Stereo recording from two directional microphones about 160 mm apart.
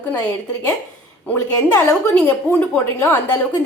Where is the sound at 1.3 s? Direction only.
20° left (ahead or behind).